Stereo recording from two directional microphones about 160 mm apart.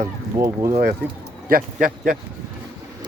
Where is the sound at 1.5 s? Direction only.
60° right (ahead or behind).